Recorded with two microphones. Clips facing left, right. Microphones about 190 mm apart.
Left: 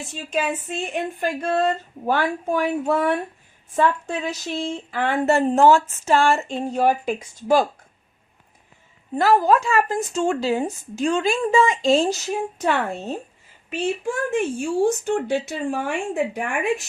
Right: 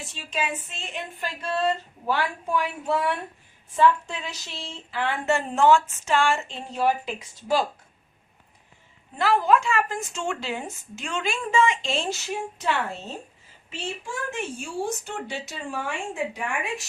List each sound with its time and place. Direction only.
0.0 s speech: 50° left (ahead or behind)
9.1 s speech: 40° left (ahead or behind)